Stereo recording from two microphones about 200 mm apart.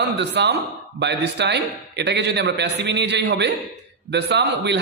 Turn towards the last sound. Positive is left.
turn(degrees=-60)  # may be behind; listen again after turning